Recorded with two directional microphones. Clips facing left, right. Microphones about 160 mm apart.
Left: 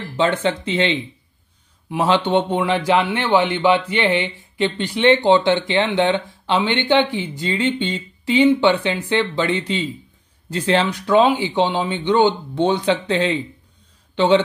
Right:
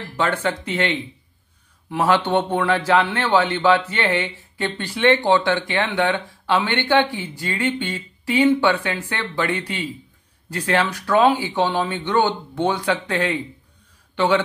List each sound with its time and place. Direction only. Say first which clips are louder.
0.2 s a man's voice: left 3 dB; 20° left (ahead or behind)